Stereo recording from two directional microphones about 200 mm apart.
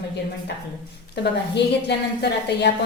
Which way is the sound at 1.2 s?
60° left (ahead or behind).